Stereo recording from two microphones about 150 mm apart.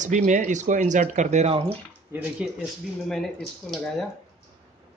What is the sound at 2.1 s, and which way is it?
Speech, 10° right (ahead or behind).